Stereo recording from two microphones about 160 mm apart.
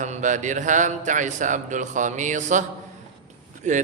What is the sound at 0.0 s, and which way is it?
A man's voice, 50° right (ahead or behind).